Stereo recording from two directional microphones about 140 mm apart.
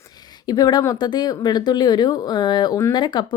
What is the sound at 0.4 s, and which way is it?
Speech, 30° left (ahead or behind).